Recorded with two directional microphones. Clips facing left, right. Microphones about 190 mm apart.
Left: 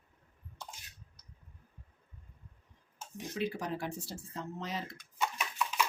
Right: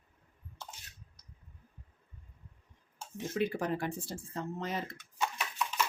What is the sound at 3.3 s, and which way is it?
Speech, 55° right (ahead or behind).